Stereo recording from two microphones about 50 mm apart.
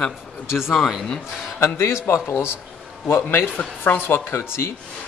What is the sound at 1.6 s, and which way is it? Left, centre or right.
A man's voice, left.